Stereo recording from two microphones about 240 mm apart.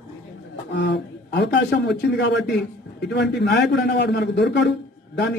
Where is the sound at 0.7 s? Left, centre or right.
Left.